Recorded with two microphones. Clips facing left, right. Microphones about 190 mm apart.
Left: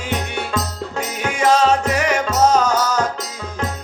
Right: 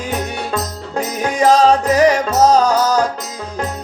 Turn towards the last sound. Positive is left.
turn(degrees=-35)  # may be behind; listen again after turning